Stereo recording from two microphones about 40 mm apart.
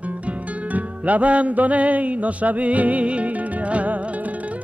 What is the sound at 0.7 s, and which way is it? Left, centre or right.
Music, right.